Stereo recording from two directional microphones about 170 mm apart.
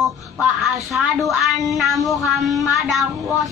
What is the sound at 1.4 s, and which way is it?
Speech, centre (ahead or behind).